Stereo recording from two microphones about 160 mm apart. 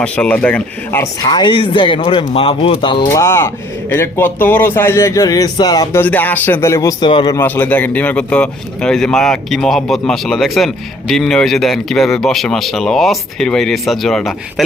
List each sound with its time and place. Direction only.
0.0 s a man's voice: 10° left (ahead or behind)
1.3 s speech: 30° left (ahead or behind)
3.2 s a man's voice: 15° left (ahead or behind)
7.1 s speech: 35° left (ahead or behind)
7.3 s speech: 15° left (ahead or behind)